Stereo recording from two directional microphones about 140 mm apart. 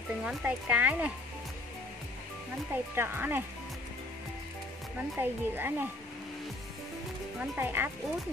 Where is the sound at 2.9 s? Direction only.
15° right (ahead or behind).